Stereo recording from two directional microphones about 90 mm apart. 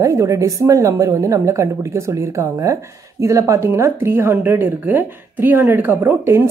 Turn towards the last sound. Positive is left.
turn(degrees=-25)  # may be behind; listen again after turning